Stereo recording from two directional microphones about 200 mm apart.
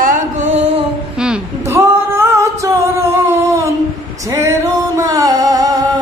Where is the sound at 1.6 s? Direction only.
15° right (ahead or behind).